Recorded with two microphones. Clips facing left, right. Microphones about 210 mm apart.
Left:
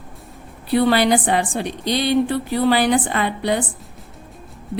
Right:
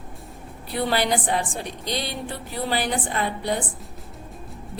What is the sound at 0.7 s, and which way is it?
A woman's voice, 80° left.